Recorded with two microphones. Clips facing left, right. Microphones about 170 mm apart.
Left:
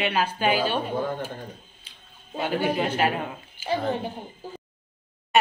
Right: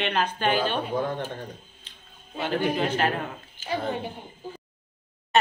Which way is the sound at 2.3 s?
10° left (ahead or behind).